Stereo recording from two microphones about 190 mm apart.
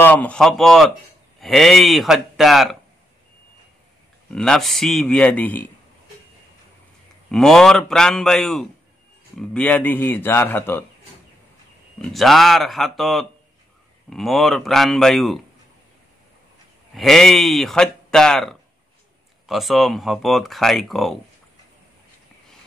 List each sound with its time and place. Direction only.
0.0 s speech: 10° left (ahead or behind)
4.3 s speech: 5° left (ahead or behind)
7.2 s speech: centre (ahead or behind)
12.0 s speech: centre (ahead or behind)
16.9 s speech: centre (ahead or behind)